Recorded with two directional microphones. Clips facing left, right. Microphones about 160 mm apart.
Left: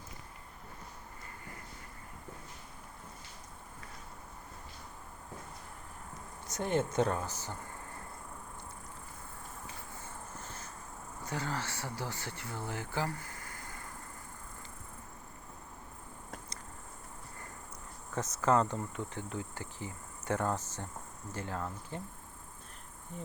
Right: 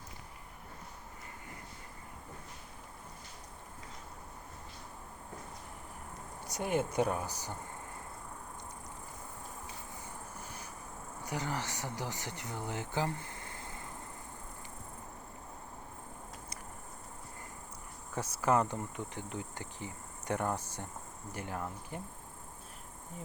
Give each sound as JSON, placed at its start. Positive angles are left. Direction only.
{"t": 6.5, "sound": "speech", "side_deg": -10}
{"t": 9.9, "sound": "vehicle", "side_deg": -10}
{"t": 11.2, "sound": "speech", "side_deg": -15}
{"t": 18.1, "sound": "speech", "side_deg": -10}